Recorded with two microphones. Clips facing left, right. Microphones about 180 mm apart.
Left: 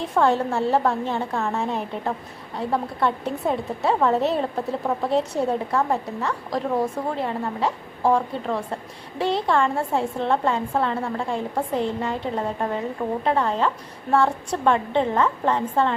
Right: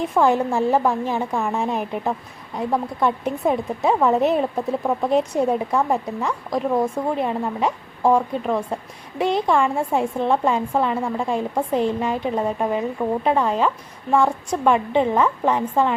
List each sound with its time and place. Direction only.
0.0 s a woman's voice: 10° right (ahead or behind)